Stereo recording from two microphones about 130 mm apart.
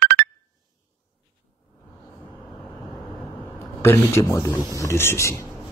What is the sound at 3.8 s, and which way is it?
Speech, 20° left (ahead or behind).